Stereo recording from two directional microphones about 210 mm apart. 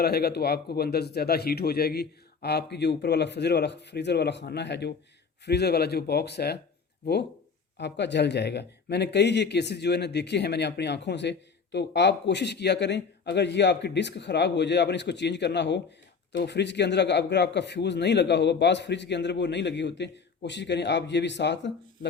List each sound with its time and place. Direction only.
0.0 s speech: 45° left (ahead or behind)
7.8 s a man's voice: 55° left (ahead or behind)